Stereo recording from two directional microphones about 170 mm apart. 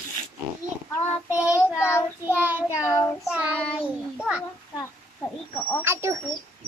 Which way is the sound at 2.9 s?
15° left (ahead or behind).